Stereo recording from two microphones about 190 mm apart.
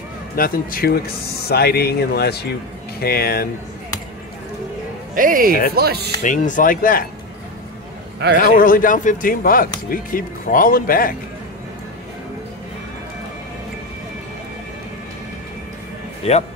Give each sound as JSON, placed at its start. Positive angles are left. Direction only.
{"t": 0.4, "sound": "speech", "side_deg": 50}
{"t": 5.1, "sound": "speech", "side_deg": -45}
{"t": 6.2, "sound": "speech", "side_deg": 40}
{"t": 8.4, "sound": "speech", "side_deg": 45}
{"t": 16.2, "sound": "speech", "side_deg": 30}